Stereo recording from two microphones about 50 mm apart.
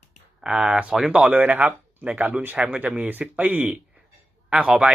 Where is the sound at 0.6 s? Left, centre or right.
Centre.